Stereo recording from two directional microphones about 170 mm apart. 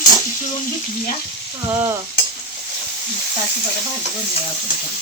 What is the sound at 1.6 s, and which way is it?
Speech, 15° right (ahead or behind).